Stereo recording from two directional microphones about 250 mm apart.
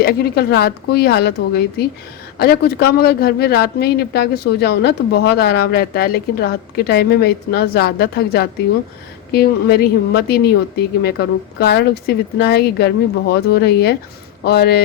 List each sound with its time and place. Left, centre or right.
0.0 s speech: left